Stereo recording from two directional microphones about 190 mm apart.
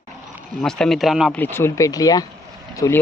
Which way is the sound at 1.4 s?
10° left (ahead or behind).